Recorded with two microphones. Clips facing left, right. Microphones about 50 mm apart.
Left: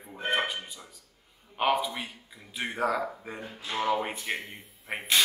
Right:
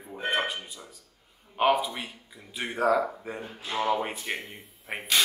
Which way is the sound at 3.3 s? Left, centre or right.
Right.